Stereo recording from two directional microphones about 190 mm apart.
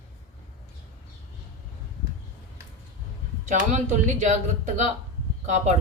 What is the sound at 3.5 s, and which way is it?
Speech, 40° right (ahead or behind).